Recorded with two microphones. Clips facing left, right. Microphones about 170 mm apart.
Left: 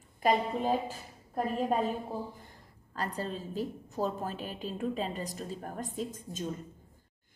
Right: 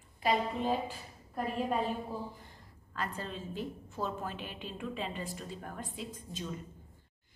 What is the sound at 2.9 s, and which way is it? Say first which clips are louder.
A woman's voice: left 3 dB; 35° left (ahead or behind).